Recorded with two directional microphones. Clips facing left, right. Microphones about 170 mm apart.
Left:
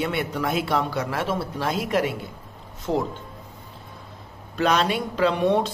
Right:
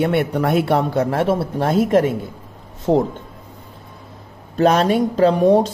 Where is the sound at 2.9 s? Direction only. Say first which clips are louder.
Right 8 dB; 35° right (ahead or behind).